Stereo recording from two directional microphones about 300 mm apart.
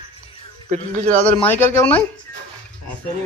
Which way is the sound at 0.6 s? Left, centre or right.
Right.